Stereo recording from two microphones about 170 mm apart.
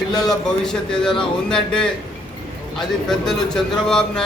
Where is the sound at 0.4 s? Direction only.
5° left (ahead or behind).